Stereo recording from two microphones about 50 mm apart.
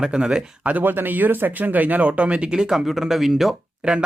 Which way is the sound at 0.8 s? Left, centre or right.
Right.